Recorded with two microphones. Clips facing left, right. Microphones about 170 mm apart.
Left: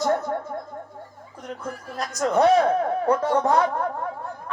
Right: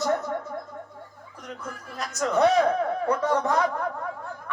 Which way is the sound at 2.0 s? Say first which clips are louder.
Left 2 dB; 40° left (ahead or behind).